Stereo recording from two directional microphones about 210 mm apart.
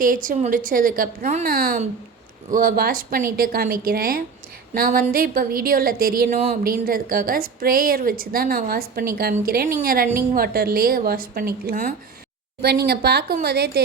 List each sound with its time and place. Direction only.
0.0 s a woman's voice: 40° right (ahead or behind)